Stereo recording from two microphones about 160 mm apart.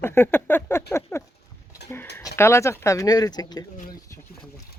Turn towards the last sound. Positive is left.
turn(degrees=25)  # may be behind; listen again after turning